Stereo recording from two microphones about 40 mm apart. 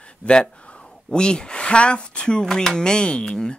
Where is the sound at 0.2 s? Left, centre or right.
Left.